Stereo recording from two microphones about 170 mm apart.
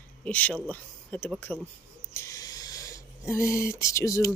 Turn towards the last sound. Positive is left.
turn(degrees=20)  # may be behind; listen again after turning